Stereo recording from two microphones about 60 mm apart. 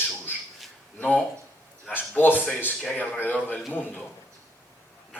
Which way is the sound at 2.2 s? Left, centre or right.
Left.